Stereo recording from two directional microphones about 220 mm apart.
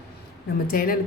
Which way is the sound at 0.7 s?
40° left (ahead or behind).